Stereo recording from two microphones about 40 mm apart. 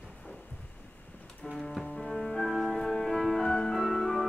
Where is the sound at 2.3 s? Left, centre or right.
Centre.